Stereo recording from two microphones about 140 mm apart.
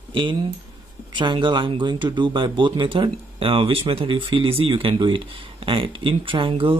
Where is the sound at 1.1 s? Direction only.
35° right (ahead or behind).